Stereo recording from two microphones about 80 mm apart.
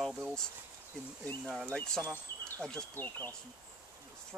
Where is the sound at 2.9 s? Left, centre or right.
Left.